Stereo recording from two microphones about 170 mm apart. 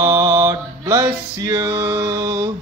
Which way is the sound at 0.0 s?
20° right (ahead or behind).